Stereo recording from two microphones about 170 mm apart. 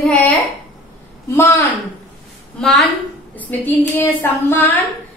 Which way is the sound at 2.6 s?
5° left (ahead or behind).